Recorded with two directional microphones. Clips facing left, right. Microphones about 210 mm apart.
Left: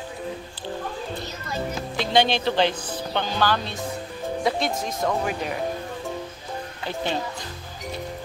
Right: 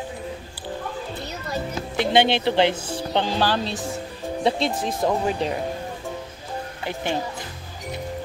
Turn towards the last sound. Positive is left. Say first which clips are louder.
# right 1 dB
turn(degrees=-15)  # may be behind; listen again after turning